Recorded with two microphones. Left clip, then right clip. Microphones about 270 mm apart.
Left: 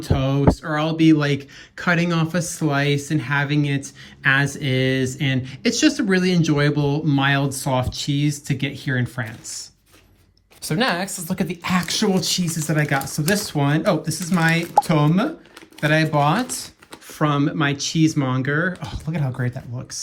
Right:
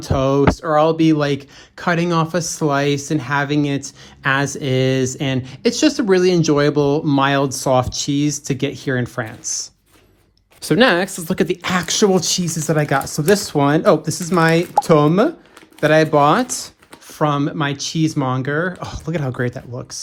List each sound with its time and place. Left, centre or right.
0.0 s speech: centre
10.6 s speech: right
17.2 s speech: centre
19.2 s speech: left